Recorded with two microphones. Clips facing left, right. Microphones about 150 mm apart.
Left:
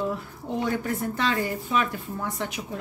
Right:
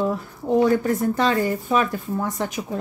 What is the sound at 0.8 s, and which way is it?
A woman's voice, 40° right (ahead or behind).